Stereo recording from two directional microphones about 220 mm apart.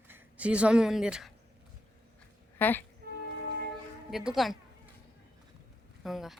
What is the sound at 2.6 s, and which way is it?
Speech, 10° left (ahead or behind).